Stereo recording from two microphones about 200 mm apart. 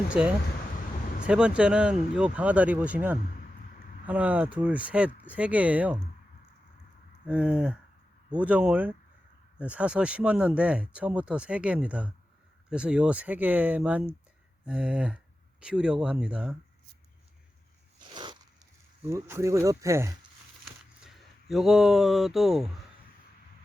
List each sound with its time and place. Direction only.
0.1 s speech: 5° right (ahead or behind)
7.3 s speech: 5° right (ahead or behind)
18.1 s zipper: 20° right (ahead or behind)
19.1 s speech: 15° right (ahead or behind)
21.0 s speech: centre (ahead or behind)